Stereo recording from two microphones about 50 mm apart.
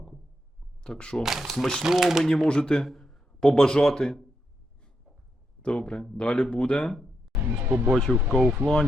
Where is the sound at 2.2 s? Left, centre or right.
Centre.